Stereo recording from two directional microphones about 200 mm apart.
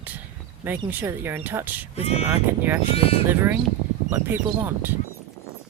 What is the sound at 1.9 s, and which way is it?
Speech, 30° left (ahead or behind).